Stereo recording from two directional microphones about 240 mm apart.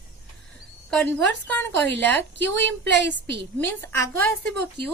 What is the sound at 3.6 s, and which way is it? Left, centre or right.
Speech, centre.